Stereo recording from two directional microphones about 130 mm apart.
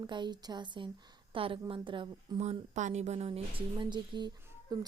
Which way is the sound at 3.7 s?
35° right (ahead or behind).